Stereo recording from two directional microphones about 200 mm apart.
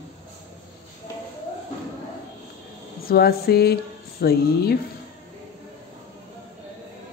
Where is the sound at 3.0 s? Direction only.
50° left (ahead or behind).